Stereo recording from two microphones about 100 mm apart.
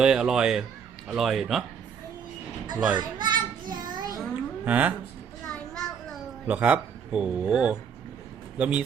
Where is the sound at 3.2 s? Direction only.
50° right (ahead or behind).